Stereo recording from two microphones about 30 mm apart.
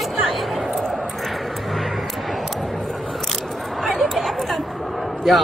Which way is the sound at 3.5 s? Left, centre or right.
Centre.